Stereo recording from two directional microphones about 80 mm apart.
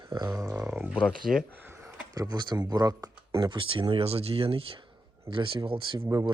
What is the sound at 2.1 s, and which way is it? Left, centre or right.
Speech, right.